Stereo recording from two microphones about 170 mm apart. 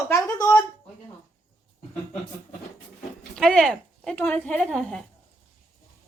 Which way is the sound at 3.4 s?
Centre (ahead or behind).